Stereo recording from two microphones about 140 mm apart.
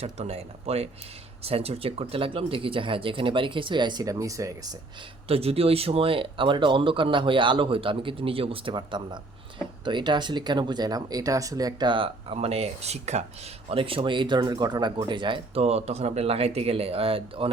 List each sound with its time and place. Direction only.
0.0 s speech: 50° right (ahead or behind); by 4.7 s 25° right (ahead or behind)
5.3 s speech: 45° right (ahead or behind)